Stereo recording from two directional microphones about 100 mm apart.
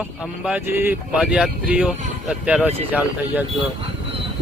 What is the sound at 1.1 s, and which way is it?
Speech, 5° right (ahead or behind).